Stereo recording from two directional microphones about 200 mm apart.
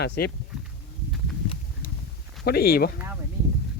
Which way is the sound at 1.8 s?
40° left (ahead or behind).